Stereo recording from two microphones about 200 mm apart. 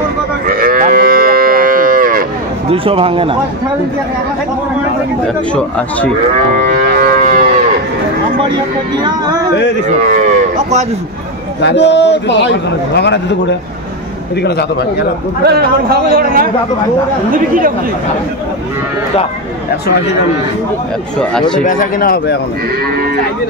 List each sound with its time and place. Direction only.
0.5 s moo: 45° right (ahead or behind)
2.7 s speech: 25° right (ahead or behind)
5.5 s speech: 5° left (ahead or behind)
6.5 s music: 40° right (ahead or behind)
10.1 s speech: 35° right (ahead or behind)
11.6 s a man's voice: 60° left (ahead or behind)
15.4 s a man's voice: 50° right (ahead or behind)
21.2 s speech: 5° left (ahead or behind)
21.6 s speech: 45° left (ahead or behind)